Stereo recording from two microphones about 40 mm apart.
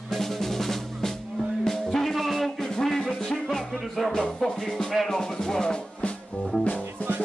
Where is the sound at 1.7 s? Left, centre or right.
Centre.